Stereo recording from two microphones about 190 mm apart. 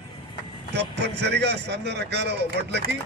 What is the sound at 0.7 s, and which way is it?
A man's voice, 60° right (ahead or behind).